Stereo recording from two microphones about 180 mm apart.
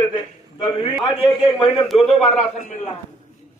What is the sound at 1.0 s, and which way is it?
Speech, 30° left (ahead or behind).